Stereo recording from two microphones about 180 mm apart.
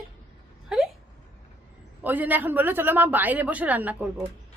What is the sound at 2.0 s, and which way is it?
A woman's voice, 10° right (ahead or behind).